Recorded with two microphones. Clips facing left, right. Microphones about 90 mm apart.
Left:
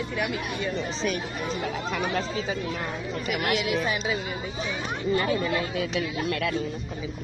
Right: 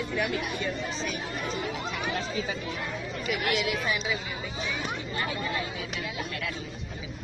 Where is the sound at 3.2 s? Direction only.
40° left (ahead or behind).